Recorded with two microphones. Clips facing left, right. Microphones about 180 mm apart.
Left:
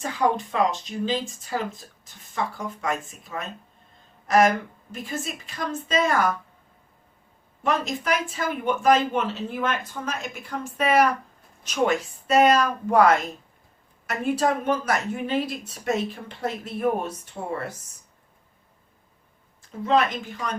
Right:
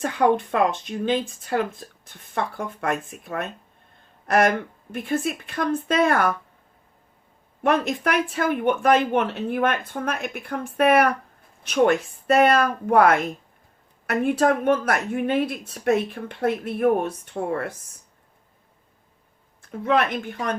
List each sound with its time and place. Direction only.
0.0 s speech: 60° right (ahead or behind)
7.6 s speech: 60° right (ahead or behind)
19.6 s speech: 60° right (ahead or behind)